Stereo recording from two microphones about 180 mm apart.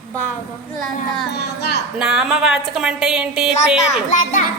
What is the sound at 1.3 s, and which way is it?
Speech, 65° left (ahead or behind).